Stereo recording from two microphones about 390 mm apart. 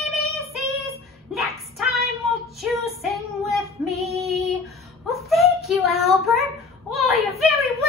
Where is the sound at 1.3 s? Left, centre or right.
Centre.